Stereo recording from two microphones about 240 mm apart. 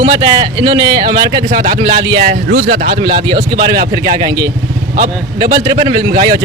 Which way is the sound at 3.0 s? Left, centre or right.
Right.